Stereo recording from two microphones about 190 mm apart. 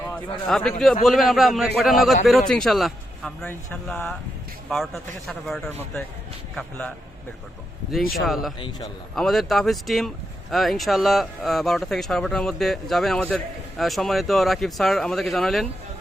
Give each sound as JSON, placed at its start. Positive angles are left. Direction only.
{"t": 0.1, "sound": "a man's voice", "side_deg": 0}
{"t": 8.2, "sound": "speech", "side_deg": 0}
{"t": 8.5, "sound": "a man's voice", "side_deg": 25}
{"t": 9.1, "sound": "speech", "side_deg": 0}